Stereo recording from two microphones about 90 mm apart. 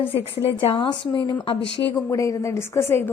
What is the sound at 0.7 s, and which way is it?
Speech, 65° left (ahead or behind).